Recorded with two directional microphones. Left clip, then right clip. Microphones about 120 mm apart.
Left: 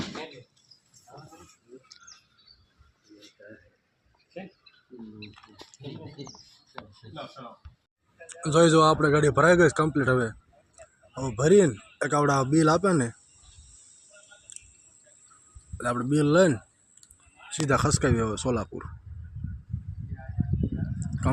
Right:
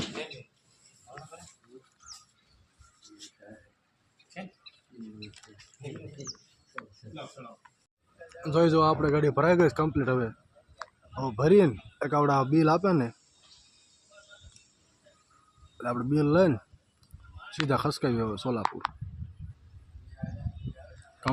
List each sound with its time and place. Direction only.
5.7 s speech: 15° right (ahead or behind)
8.3 s speech: 40° left (ahead or behind); by 13.1 s 15° left (ahead or behind)
15.8 s speech: 20° left (ahead or behind)